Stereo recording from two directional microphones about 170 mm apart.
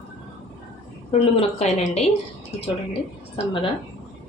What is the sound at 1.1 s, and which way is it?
Speech, 35° left (ahead or behind).